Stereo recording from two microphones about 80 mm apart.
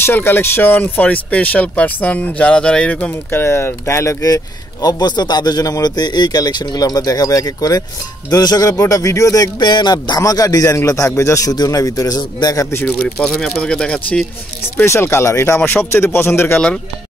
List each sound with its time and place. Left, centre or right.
0.0 s speech: left
4.8 s speech: left
11.5 s speech: left
12.8 s speech: centre
14.8 s speech: left